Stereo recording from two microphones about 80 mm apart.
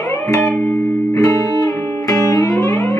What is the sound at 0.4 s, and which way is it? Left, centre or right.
Music, centre.